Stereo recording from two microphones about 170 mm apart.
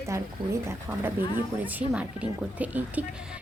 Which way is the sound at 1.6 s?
10° right (ahead or behind).